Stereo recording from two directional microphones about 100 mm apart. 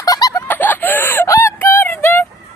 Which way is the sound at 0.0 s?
40° left (ahead or behind).